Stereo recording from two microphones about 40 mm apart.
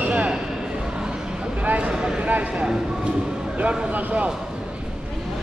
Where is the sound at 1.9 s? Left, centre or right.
Right.